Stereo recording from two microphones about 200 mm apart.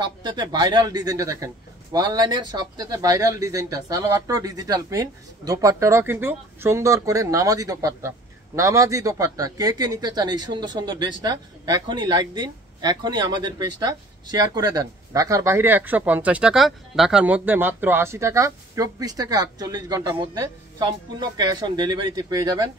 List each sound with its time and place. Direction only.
0.0 s a man's voice: 20° right (ahead or behind)